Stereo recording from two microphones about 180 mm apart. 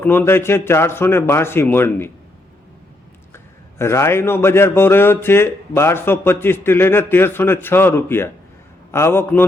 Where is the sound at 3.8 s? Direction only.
15° left (ahead or behind).